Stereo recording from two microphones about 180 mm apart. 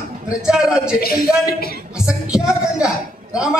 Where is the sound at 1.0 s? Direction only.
55° left (ahead or behind).